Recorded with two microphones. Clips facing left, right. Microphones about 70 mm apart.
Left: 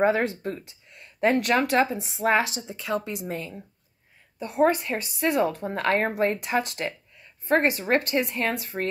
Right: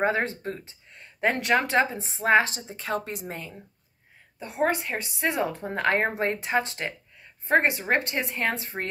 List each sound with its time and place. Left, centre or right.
0.0 s speech: right
4.4 s a woman's voice: centre